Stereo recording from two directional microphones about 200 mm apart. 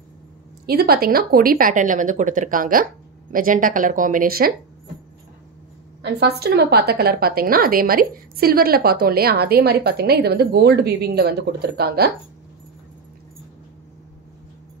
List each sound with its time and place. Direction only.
0.7 s a woman's voice: 50° right (ahead or behind)
6.0 s a woman's voice: 55° right (ahead or behind)